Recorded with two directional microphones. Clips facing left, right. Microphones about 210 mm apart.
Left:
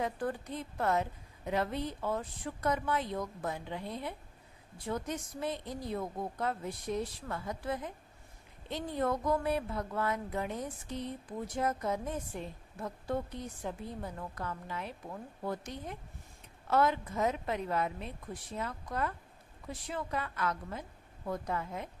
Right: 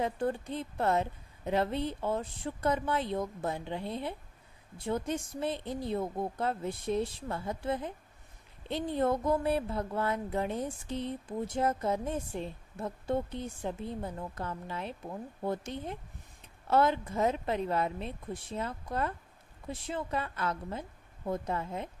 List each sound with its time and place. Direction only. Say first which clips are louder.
0.0 s speech: right 3 dB; 25° right (ahead or behind)